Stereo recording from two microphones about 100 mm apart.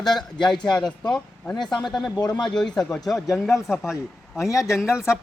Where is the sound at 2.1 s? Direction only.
40° left (ahead or behind).